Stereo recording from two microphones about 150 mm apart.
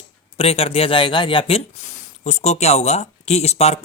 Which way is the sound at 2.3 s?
45° left (ahead or behind).